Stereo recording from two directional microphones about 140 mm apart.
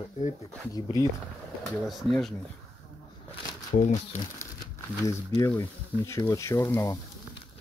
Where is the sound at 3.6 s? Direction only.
65° left (ahead or behind).